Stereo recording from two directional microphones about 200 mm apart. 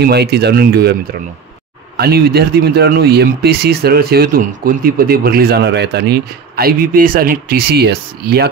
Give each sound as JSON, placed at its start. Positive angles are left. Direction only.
{"t": 0.0, "sound": "speech", "side_deg": -55}
{"t": 2.0, "sound": "speech", "side_deg": -50}